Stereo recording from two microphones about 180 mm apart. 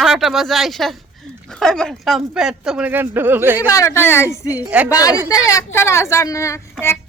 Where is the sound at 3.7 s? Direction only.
15° left (ahead or behind).